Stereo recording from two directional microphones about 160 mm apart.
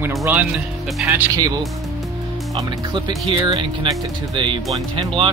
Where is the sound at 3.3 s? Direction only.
30° right (ahead or behind).